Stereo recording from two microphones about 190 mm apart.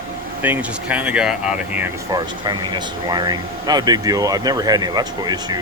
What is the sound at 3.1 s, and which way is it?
Speech, 20° right (ahead or behind).